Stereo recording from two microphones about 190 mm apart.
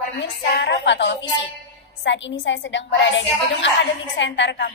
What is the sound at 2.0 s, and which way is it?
A woman's voice, 70° left (ahead or behind).